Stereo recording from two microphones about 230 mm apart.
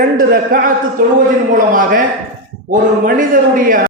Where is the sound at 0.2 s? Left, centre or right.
Right.